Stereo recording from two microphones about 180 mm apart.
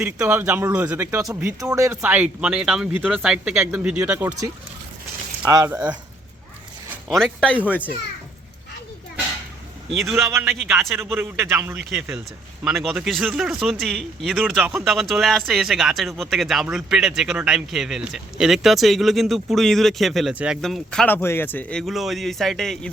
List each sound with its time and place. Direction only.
0.0 s speech: 15° right (ahead or behind)
5.5 s speech: 20° right (ahead or behind)
7.1 s speech: centre (ahead or behind)
10.4 s speech: centre (ahead or behind)
10.9 s speech: 15° right (ahead or behind)